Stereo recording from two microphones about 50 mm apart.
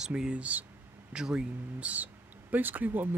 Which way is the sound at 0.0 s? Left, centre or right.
Centre.